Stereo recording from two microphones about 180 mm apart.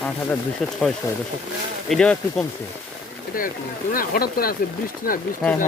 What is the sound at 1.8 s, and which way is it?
Speech, 5° left (ahead or behind).